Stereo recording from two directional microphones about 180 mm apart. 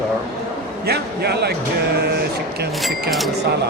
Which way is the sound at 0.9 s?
65° right (ahead or behind).